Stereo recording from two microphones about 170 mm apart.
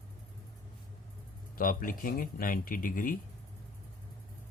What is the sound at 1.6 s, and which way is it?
Speech, 55° left (ahead or behind).